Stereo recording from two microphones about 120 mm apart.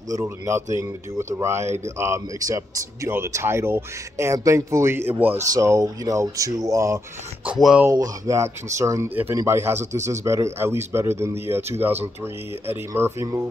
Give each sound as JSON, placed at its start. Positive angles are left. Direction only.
{"t": 0.1, "sound": "speech", "side_deg": -20}
{"t": 5.5, "sound": "speech", "side_deg": -25}
{"t": 7.4, "sound": "speech", "side_deg": -5}
{"t": 7.9, "sound": "speech", "side_deg": -25}
{"t": 12.6, "sound": "speech", "side_deg": -20}